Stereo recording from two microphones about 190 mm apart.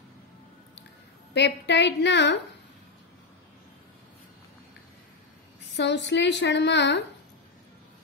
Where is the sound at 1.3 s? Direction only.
65° left (ahead or behind).